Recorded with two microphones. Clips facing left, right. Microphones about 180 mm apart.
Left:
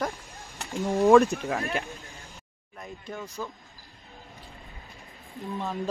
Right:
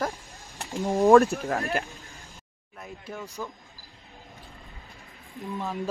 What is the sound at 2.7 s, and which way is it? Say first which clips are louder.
Speech: even; 5° right (ahead or behind).